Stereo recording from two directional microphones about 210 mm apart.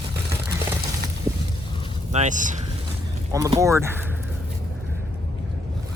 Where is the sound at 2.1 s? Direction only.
35° right (ahead or behind).